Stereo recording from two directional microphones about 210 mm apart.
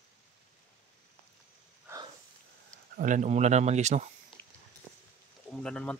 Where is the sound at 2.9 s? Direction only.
35° right (ahead or behind).